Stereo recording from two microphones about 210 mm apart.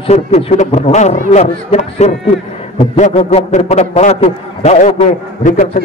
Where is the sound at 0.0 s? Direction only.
30° left (ahead or behind).